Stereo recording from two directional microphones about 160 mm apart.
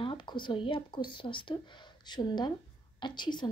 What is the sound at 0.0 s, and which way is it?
A woman's voice, 30° left (ahead or behind).